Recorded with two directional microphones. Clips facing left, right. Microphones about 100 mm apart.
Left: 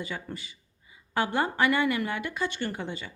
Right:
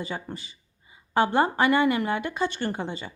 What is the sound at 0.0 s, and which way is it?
A woman's voice, 30° right (ahead or behind).